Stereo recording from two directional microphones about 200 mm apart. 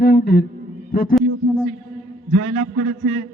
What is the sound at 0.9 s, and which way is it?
Speech, 45° left (ahead or behind).